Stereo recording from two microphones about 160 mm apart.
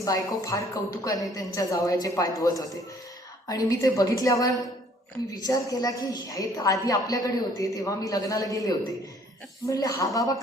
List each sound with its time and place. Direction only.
0.0 s a woman's voice: 20° left (ahead or behind)